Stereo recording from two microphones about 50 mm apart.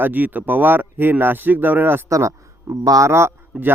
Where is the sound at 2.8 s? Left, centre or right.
Right.